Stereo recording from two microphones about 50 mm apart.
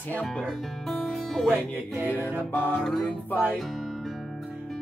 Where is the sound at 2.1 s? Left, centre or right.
Right.